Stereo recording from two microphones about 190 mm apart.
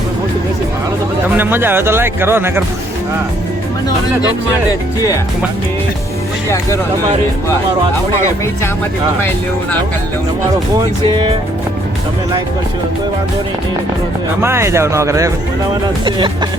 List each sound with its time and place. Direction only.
1.4 s speech: 10° right (ahead or behind)
14.4 s speech: 15° right (ahead or behind)
16.0 s music: 25° right (ahead or behind)